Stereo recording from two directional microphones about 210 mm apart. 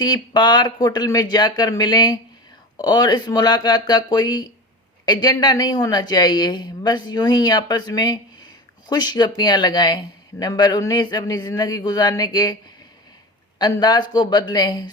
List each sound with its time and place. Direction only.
0.0 s speech: 20° left (ahead or behind)
13.6 s speech: 20° left (ahead or behind)